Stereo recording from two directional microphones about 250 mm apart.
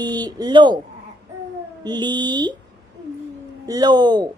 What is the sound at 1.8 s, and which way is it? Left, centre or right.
Speech, centre.